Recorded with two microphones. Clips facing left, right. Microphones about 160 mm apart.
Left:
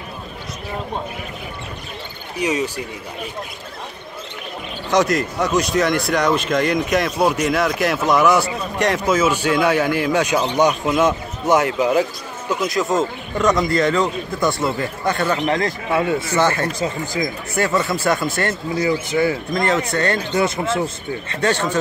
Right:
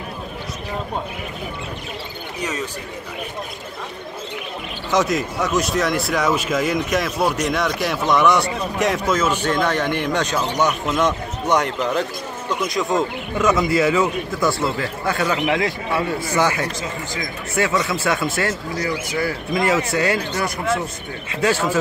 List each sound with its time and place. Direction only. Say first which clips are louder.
2.4 s speech: left 6 dB; 10° left (ahead or behind)
4.9 s speech: left 2 dB; centre (ahead or behind)
15.9 s a man's voice: left 7 dB; 25° left (ahead or behind)
16.3 s speech: left 1 dB; 10° right (ahead or behind)
18.8 s a man's voice: left 7 dB; 25° left (ahead or behind)
19.5 s speech: even; 10° right (ahead or behind)
20.3 s a man's voice: left 3 dB; 25° left (ahead or behind)
21.3 s speech: right 1 dB; 5° right (ahead or behind)